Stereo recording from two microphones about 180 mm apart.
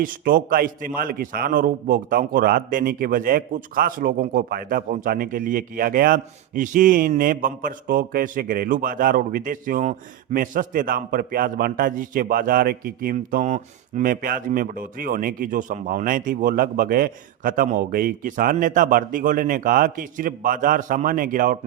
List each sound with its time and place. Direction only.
0.0 s a man's voice: 55° right (ahead or behind)